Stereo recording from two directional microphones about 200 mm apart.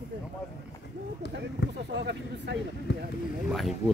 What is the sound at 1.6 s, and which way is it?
Speech, 60° left (ahead or behind).